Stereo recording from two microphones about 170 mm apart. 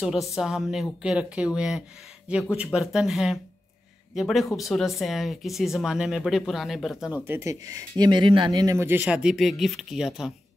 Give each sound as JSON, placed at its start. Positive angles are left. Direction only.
{"t": 0.0, "sound": "speech", "side_deg": -5}
{"t": 7.2, "sound": "speech", "side_deg": -15}